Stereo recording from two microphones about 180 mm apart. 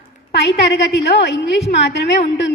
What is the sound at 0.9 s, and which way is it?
A woman's voice, 75° left (ahead or behind).